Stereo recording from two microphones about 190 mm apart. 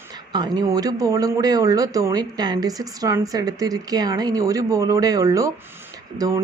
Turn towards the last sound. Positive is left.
turn(degrees=-20)  # may be behind; listen again after turning